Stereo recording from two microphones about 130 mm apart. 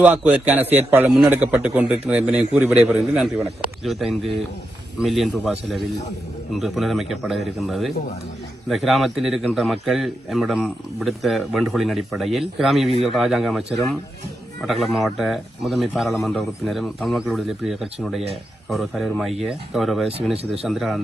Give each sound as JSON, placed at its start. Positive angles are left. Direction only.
{"t": 0.0, "sound": "a man's voice", "side_deg": -15}
{"t": 6.5, "sound": "a man's voice", "side_deg": 0}